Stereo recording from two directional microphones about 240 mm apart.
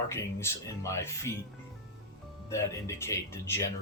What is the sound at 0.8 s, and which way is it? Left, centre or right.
Speech, centre.